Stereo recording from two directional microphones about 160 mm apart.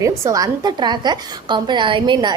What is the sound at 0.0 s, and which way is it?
A woman's voice, 20° right (ahead or behind).